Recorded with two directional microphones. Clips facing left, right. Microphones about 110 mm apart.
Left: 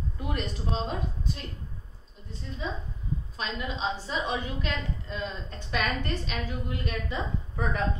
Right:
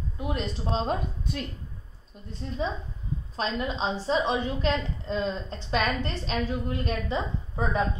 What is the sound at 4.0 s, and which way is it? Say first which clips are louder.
A woman's voice: right 5 dB; 30° right (ahead or behind).